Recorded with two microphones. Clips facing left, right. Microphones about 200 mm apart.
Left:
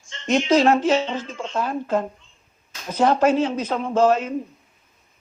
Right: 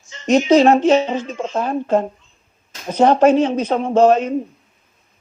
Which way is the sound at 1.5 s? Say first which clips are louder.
Right 5 dB; 25° right (ahead or behind).